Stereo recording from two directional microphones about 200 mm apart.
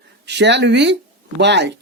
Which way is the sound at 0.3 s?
60° right (ahead or behind).